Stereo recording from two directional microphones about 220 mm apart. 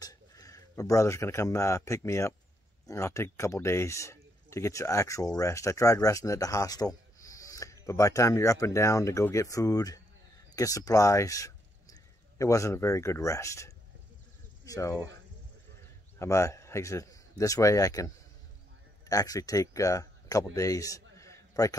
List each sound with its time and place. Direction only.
0.0 s speech: 15° left (ahead or behind)
16.2 s speech: 15° left (ahead or behind)
20.5 s a sound: 15° left (ahead or behind)